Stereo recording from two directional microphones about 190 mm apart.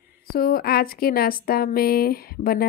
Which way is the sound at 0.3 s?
50° left (ahead or behind).